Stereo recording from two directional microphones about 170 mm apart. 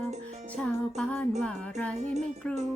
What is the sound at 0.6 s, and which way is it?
Music, 5° left (ahead or behind).